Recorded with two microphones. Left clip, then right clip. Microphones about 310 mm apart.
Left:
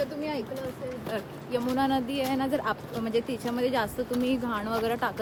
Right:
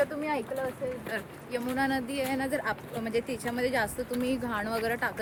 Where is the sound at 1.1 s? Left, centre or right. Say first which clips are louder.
Left 3 dB; centre.